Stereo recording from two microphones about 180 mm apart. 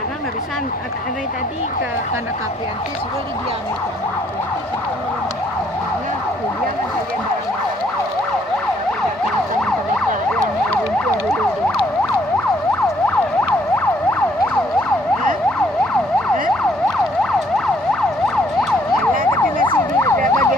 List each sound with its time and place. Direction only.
20.0 s emergency vehicle: 15° left (ahead or behind)